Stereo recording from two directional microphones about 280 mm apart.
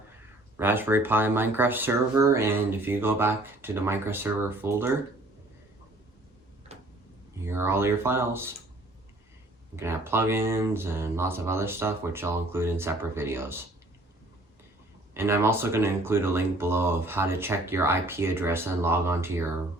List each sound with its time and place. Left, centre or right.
0.5 s speech: centre
6.7 s tick-tock: right
7.4 s speech: centre
9.7 s speech: centre
15.1 s speech: centre